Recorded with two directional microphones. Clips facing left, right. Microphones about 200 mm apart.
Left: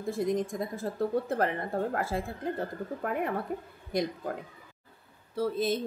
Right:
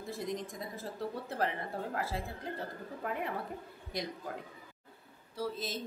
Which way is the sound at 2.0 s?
50° left (ahead or behind).